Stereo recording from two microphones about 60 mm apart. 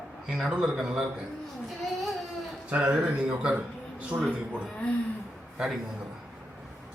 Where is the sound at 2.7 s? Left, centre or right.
Right; by 5.8 s centre.